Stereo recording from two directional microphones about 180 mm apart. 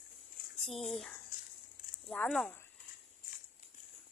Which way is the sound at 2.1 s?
5° left (ahead or behind).